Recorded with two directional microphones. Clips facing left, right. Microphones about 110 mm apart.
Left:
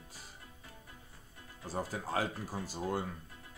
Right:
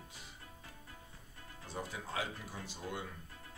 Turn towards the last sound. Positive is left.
turn(degrees=40)  # may be behind; listen again after turning